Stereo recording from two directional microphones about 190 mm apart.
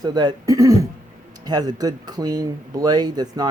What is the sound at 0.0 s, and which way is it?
Speech, 20° right (ahead or behind).